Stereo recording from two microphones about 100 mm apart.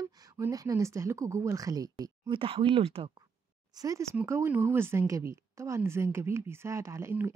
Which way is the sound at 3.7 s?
35° right (ahead or behind).